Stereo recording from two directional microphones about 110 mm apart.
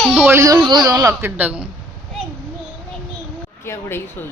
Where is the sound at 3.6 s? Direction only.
20° left (ahead or behind).